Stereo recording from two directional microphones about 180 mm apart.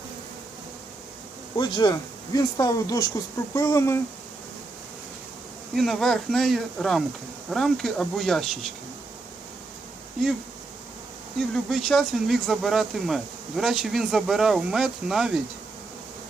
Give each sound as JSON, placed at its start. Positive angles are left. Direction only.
{"t": 1.5, "sound": "speech", "side_deg": 25}
{"t": 5.7, "sound": "speech", "side_deg": 0}
{"t": 11.3, "sound": "speech", "side_deg": 0}